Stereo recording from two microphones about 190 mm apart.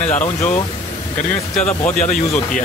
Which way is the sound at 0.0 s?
40° left (ahead or behind).